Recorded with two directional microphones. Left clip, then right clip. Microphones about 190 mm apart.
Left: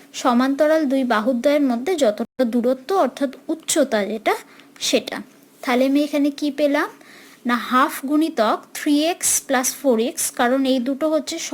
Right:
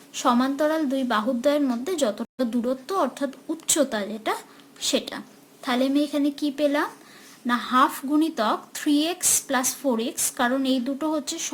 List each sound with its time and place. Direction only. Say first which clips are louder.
0.1 s a woman's voice: left 3 dB; 25° left (ahead or behind)